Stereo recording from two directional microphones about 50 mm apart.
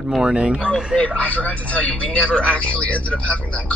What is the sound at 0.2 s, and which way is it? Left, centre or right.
Speech, centre.